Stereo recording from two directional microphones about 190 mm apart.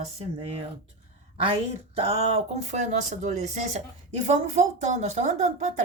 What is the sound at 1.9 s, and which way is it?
Speech, 35° right (ahead or behind).